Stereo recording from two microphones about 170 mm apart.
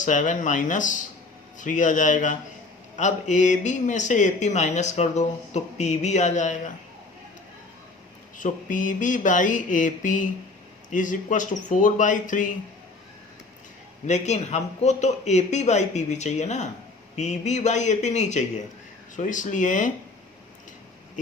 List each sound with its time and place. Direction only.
0.0 s speech: 45° left (ahead or behind)
8.4 s speech: 50° left (ahead or behind)
14.1 s speech: 40° left (ahead or behind)